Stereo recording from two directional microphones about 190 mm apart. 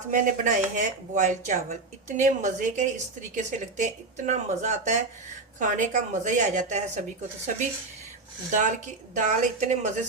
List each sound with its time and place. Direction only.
0.1 s speech: 40° right (ahead or behind)
9.1 s speech: 40° right (ahead or behind)